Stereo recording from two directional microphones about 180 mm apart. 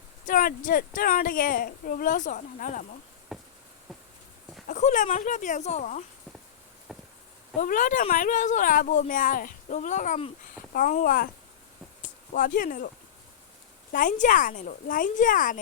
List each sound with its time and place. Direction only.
0.3 s speech: 50° left (ahead or behind)
3.3 s insect: centre (ahead or behind)
4.7 s speech: 45° left (ahead or behind)
6.9 s a sound: centre (ahead or behind)
7.6 s speech: 50° left (ahead or behind)
10.8 s speech: 50° left (ahead or behind)
13.9 s speech: 45° left (ahead or behind)